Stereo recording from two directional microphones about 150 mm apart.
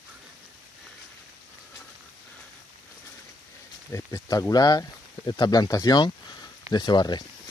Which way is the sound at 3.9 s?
25° left (ahead or behind).